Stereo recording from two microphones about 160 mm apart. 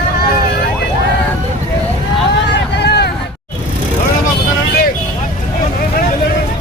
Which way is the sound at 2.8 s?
90° left.